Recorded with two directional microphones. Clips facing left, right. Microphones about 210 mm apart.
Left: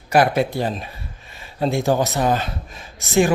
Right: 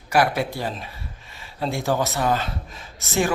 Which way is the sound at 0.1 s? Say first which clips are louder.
Left 4 dB; 20° left (ahead or behind).